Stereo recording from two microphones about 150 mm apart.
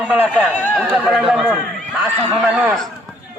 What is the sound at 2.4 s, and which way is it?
Speech, 10° right (ahead or behind).